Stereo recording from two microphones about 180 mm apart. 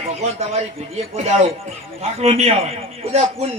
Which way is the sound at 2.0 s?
35° right (ahead or behind).